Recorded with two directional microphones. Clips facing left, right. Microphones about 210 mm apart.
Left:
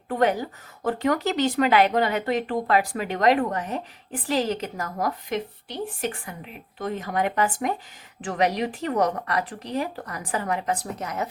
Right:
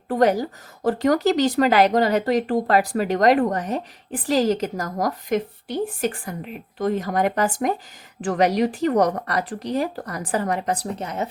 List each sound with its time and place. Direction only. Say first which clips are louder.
0.1 s speech: right 4 dB; 40° right (ahead or behind)